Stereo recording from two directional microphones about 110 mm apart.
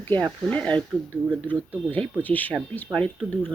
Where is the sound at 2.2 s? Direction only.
15° left (ahead or behind).